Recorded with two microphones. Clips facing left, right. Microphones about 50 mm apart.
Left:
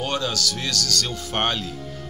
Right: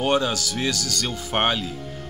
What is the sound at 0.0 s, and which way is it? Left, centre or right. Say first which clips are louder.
Speech: right 3 dB; centre.